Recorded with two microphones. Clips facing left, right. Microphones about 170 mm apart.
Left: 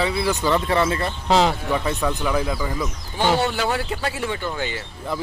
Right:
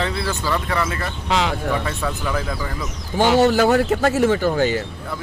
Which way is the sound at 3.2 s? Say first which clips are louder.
Right 6 dB; 45° right (ahead or behind).